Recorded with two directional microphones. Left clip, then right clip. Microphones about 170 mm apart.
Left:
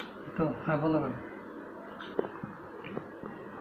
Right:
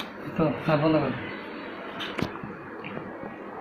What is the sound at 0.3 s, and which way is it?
Speech, 5° right (ahead or behind).